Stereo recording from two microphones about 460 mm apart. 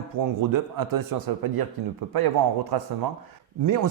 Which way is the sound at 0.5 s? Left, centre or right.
Right.